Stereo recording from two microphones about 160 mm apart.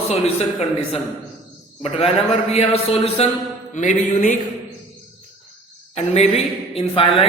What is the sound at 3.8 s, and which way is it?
Music, 50° left (ahead or behind).